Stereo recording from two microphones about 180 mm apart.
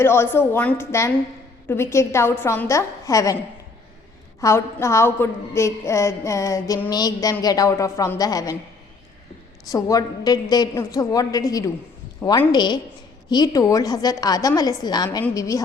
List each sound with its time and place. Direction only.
0.0 s a woman's voice: 15° left (ahead or behind)
4.4 s a woman's voice: 15° left (ahead or behind)
9.6 s a woman's voice: 20° left (ahead or behind)